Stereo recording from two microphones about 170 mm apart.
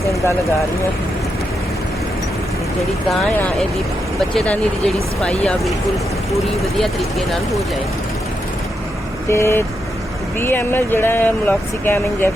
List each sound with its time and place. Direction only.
3.1 s speech: 5° left (ahead or behind)
9.3 s speech: 15° left (ahead or behind)